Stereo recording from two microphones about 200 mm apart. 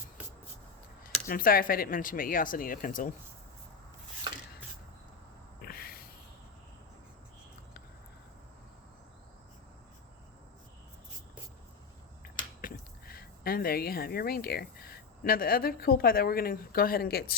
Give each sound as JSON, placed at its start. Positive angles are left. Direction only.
{"t": 1.3, "sound": "speech", "side_deg": 45}
{"t": 5.6, "sound": "a sound", "side_deg": 50}
{"t": 12.6, "sound": "speech", "side_deg": 50}